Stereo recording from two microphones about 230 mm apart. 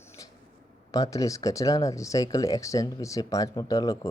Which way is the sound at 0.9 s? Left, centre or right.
Centre.